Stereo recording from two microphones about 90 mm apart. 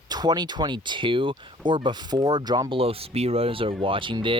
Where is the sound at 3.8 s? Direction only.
75° right (ahead or behind).